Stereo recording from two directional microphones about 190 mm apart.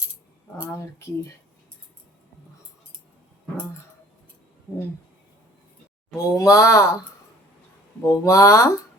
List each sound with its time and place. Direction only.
0.6 s speech: 10° left (ahead or behind)
6.1 s speech: 15° left (ahead or behind)
8.0 s speech: 15° left (ahead or behind)